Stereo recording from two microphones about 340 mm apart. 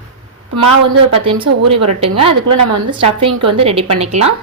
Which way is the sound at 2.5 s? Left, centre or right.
Right.